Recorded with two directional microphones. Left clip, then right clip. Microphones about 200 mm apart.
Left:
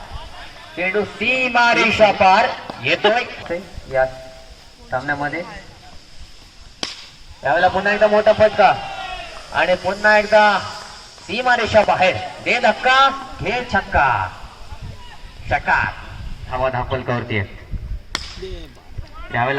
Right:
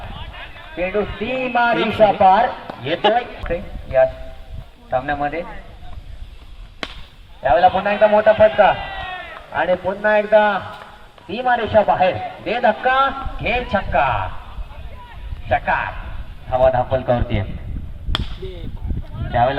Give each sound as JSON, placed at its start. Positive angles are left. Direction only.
{"t": 0.8, "sound": "a man's voice", "side_deg": -35}
{"t": 2.7, "sound": "a sound", "side_deg": -30}
{"t": 3.5, "sound": "stir", "side_deg": -40}
{"t": 4.9, "sound": "speech", "side_deg": -35}
{"t": 7.4, "sound": "a man's voice", "side_deg": -40}
{"t": 9.5, "sound": "a man's voice", "side_deg": -25}
{"t": 13.0, "sound": "a man's voice", "side_deg": -45}
{"t": 15.5, "sound": "a man's voice", "side_deg": -50}
{"t": 19.3, "sound": "speech", "side_deg": -30}